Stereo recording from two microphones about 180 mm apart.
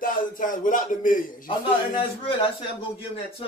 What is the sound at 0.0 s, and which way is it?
Speech, 50° left (ahead or behind).